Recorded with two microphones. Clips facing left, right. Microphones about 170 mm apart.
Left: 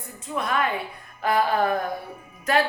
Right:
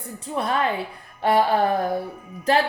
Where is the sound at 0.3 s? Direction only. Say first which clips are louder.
Right 2 dB; 30° right (ahead or behind).